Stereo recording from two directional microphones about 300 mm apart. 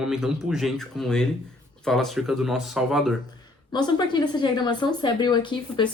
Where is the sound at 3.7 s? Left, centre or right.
Centre.